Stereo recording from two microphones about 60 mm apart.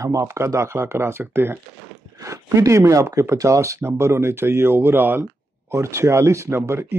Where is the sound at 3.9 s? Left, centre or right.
Right.